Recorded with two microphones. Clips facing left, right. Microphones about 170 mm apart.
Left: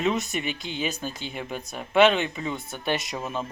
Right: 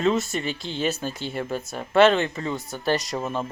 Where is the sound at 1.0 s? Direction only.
40° right (ahead or behind).